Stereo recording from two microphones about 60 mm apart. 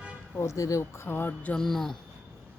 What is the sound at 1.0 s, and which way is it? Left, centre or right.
Music, left.